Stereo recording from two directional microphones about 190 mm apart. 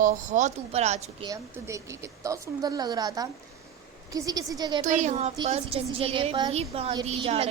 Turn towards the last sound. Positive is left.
turn(degrees=-30)  # may be behind; listen again after turning